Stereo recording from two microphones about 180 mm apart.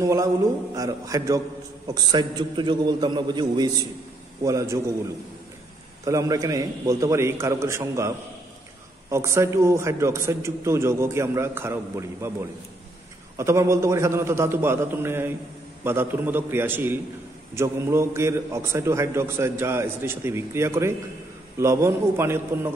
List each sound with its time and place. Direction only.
0.0 s a man's voice: 20° right (ahead or behind)
6.0 s a man's voice: 20° right (ahead or behind)
9.1 s a man's voice: 15° right (ahead or behind)